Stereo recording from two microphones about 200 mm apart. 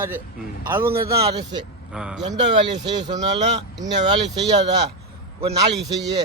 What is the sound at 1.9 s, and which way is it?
Speech, 5° right (ahead or behind).